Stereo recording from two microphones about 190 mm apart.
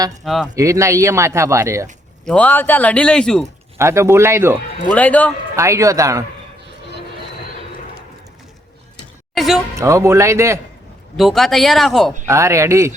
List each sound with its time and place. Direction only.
0.5 s speech: 15° right (ahead or behind)
2.2 s a man's voice: 5° left (ahead or behind)
3.8 s speech: 15° right (ahead or behind)
4.9 s a man's voice: 10° left (ahead or behind)
5.5 s speech: 15° right (ahead or behind)
9.3 s speech: centre (ahead or behind)
9.7 s speech: 15° right (ahead or behind)
11.2 s a man's voice: centre (ahead or behind)
12.3 s speech: 15° right (ahead or behind)